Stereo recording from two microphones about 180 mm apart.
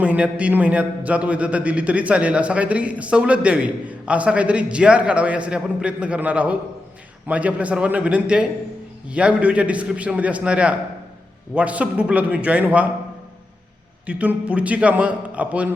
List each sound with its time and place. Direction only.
0.0 s a man's voice: 5° right (ahead or behind)
14.1 s a man's voice: 5° right (ahead or behind)